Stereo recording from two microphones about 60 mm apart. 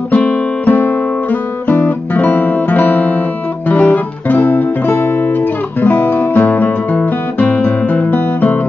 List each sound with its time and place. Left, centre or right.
0.1 s music: left
1.7 s guitar: left
3.6 s music: left